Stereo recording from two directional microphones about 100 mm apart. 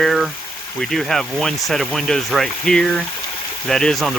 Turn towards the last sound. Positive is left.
turn(degrees=5)  # may be behind; listen again after turning